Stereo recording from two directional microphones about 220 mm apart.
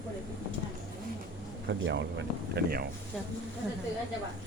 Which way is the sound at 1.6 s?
55° right (ahead or behind).